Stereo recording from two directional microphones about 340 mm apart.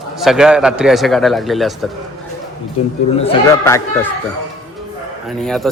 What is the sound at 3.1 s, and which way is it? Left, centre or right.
Speech, centre.